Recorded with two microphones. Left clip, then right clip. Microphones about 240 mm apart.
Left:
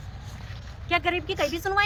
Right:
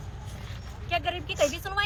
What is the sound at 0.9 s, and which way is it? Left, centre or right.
Speech, centre.